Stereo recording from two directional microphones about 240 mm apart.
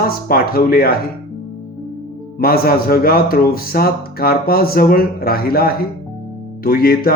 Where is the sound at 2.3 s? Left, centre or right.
Left.